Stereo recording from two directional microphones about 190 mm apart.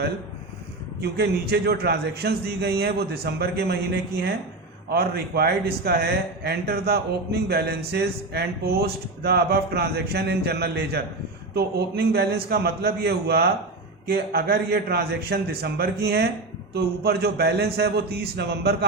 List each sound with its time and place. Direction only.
1.0 s a man's voice: 60° right (ahead or behind)